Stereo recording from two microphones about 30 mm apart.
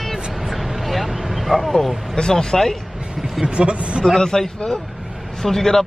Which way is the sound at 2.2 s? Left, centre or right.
Left.